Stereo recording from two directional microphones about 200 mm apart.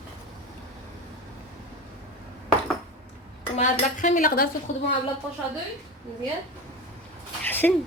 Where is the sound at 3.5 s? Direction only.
40° left (ahead or behind).